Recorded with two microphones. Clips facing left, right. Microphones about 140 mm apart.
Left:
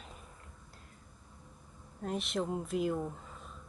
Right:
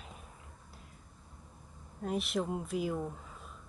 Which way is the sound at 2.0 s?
Centre (ahead or behind).